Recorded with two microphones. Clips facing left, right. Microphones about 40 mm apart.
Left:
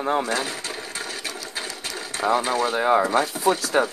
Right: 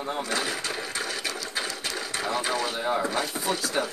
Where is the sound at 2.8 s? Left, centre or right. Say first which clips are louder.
Left 8 dB; left.